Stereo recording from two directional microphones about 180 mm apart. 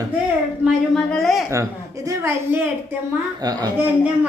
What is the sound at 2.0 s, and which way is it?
A man's voice, 15° right (ahead or behind).